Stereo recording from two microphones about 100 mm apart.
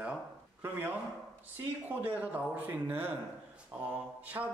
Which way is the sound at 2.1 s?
15° right (ahead or behind).